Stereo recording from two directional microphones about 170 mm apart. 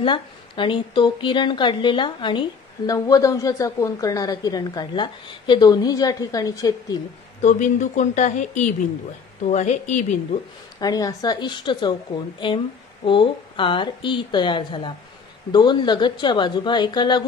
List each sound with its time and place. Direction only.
0.0 s a woman's voice: 30° left (ahead or behind)
7.4 s speech: 45° left (ahead or behind)
10.8 s a woman's voice: 20° left (ahead or behind)